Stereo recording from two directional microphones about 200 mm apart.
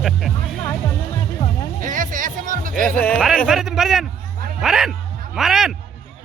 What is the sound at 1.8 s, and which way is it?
Music, 40° right (ahead or behind).